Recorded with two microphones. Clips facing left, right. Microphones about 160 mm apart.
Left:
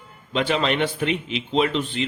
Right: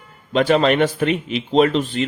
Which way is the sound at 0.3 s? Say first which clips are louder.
Right 6 dB; 45° right (ahead or behind).